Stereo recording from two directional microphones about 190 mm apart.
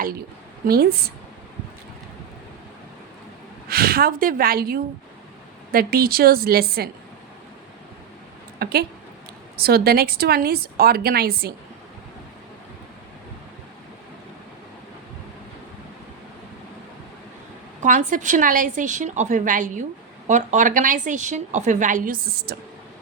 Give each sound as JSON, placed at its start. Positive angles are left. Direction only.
{"t": 0.7, "sound": "speech", "side_deg": -55}
{"t": 3.7, "sound": "a woman's voice", "side_deg": -50}
{"t": 8.5, "sound": "speech", "side_deg": -55}
{"t": 17.8, "sound": "a woman's voice", "side_deg": -45}